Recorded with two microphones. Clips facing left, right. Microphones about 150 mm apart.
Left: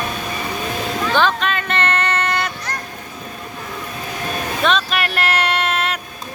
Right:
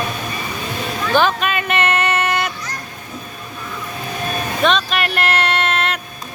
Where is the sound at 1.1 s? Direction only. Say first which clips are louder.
Right 3 dB; 10° right (ahead or behind).